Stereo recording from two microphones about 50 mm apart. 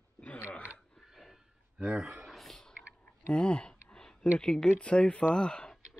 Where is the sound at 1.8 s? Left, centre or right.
Centre.